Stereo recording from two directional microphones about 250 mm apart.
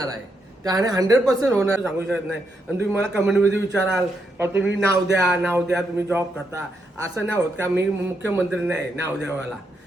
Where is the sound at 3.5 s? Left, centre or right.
Right.